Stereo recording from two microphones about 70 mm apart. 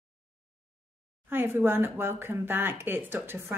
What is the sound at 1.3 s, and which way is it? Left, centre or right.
Speech, right.